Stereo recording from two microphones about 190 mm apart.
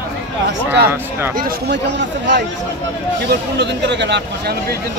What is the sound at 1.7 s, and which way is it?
Speech, 65° right (ahead or behind).